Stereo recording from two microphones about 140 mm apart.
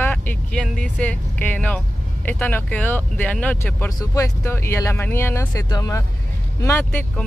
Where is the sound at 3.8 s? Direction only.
25° left (ahead or behind).